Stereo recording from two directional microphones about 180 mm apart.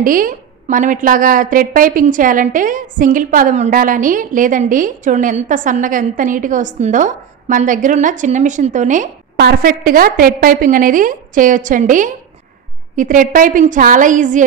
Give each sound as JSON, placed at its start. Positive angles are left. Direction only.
{"t": 0.0, "sound": "a woman's voice", "side_deg": -50}
{"t": 9.4, "sound": "a woman's voice", "side_deg": -55}